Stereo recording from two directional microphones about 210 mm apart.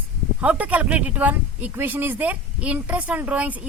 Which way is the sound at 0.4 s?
5° right (ahead or behind).